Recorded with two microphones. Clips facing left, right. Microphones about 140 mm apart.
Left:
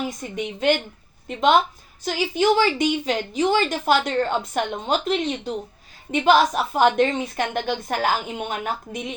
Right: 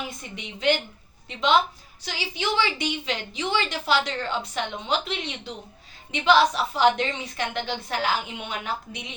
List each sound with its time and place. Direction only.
0.2 s a woman's voice: 45° left (ahead or behind)